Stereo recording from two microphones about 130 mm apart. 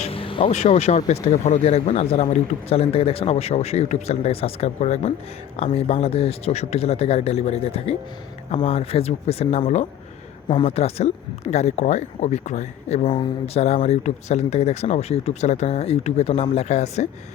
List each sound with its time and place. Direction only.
0.0 s vehicle: 45° left (ahead or behind)
0.4 s speech: 60° left (ahead or behind)
10.7 s speech: 55° left (ahead or behind)
13.1 s speech: 40° left (ahead or behind); by 17.1 s 60° left (ahead or behind)